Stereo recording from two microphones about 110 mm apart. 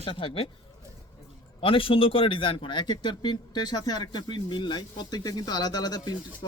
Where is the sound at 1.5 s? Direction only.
55° left (ahead or behind).